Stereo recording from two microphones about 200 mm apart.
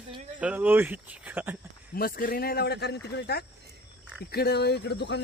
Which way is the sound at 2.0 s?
45° left (ahead or behind).